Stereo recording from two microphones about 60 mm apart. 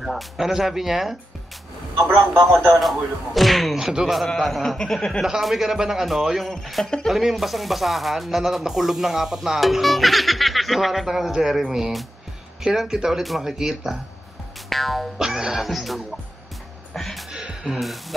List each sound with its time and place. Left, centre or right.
0.0 s speech: centre
2.0 s a man's voice: right
2.8 s speech: centre
3.8 s speech: centre
4.4 s speech: centre
7.1 s speech: centre
16.9 s music: centre
17.3 s music: centre